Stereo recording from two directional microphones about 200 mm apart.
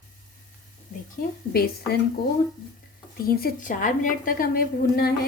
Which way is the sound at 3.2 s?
50° left (ahead or behind).